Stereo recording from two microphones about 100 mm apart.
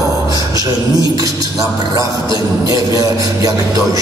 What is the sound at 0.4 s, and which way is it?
Speech, 35° right (ahead or behind).